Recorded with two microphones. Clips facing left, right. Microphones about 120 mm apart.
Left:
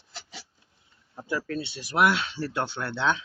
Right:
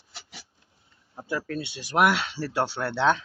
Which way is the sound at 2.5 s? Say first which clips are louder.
Right 3 dB; 30° right (ahead or behind).